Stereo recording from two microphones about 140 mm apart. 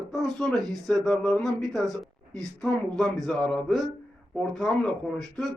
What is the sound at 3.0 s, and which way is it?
Speech, centre (ahead or behind).